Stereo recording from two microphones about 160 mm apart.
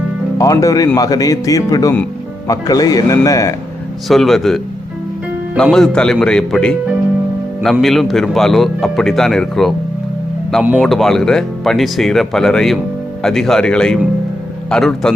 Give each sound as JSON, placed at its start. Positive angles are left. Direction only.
{"t": 0.3, "sound": "speech", "side_deg": 20}
{"t": 4.1, "sound": "speech", "side_deg": 0}
{"t": 5.7, "sound": "speech", "side_deg": 5}